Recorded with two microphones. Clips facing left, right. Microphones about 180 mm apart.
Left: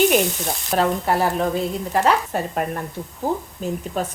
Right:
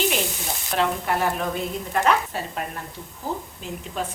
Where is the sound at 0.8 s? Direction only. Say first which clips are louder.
Left 3 dB; 40° left (ahead or behind).